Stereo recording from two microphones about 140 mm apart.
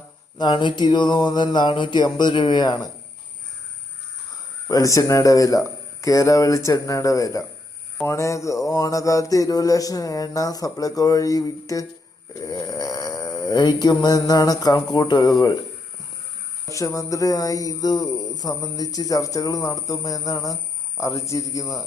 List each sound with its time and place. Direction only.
0.3 s a sound: 30° left (ahead or behind)
4.7 s speech: 25° left (ahead or behind)
16.6 s speech: 20° left (ahead or behind)